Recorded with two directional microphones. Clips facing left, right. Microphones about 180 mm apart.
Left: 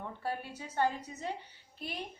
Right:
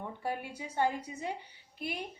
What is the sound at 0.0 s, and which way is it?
A woman's voice, 15° right (ahead or behind).